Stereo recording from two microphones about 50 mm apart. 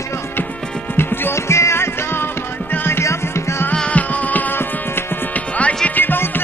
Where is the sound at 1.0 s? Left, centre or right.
Left.